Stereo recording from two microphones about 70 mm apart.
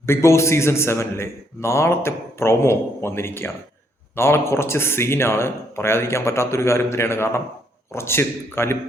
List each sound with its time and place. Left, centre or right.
0.0 s a man's voice: left